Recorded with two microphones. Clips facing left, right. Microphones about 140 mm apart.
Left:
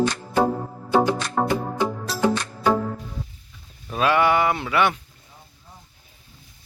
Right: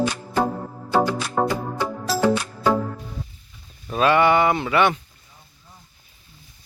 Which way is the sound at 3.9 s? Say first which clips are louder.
Right 2 dB; 5° left (ahead or behind).